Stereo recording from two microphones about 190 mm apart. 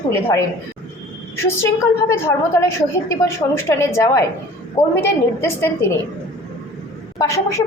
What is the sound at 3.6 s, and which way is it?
A woman's voice, 15° left (ahead or behind).